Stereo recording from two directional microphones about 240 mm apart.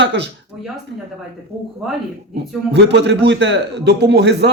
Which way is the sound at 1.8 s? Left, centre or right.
Centre.